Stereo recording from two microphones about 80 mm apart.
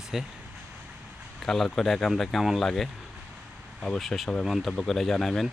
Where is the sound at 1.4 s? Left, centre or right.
Centre.